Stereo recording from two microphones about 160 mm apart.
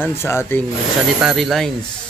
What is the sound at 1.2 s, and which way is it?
Speech, centre (ahead or behind).